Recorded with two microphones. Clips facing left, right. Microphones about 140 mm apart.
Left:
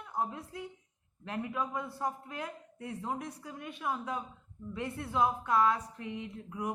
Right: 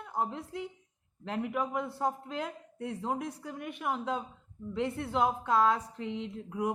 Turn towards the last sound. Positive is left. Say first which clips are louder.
# right 5 dB
turn(degrees=-90)